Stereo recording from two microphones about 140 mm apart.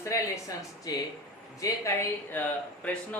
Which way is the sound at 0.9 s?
25° left (ahead or behind).